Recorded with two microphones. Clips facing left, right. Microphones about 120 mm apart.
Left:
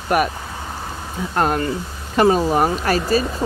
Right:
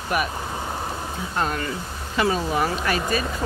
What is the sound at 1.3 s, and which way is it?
Speech, 50° left (ahead or behind).